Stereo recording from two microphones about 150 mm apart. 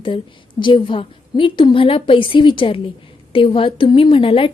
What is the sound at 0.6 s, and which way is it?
A woman's voice, 35° left (ahead or behind).